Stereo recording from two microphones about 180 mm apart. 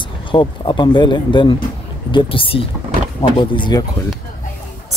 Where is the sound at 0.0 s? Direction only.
25° left (ahead or behind).